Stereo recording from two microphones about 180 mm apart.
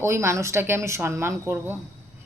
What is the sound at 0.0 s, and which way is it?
A woman's voice, 15° right (ahead or behind).